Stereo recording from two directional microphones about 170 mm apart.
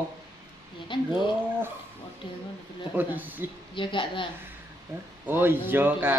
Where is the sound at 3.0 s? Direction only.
10° right (ahead or behind).